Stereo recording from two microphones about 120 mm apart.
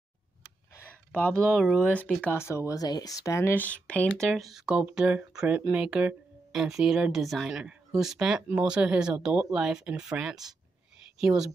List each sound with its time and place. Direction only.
1.1 s speech: 5° left (ahead or behind)